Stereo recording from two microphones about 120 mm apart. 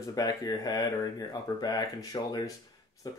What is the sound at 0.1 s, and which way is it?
Speech, 30° left (ahead or behind).